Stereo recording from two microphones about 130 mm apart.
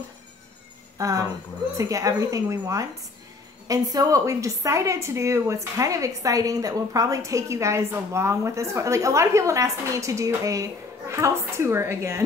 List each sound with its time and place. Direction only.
0.9 s a woman's voice: 25° right (ahead or behind)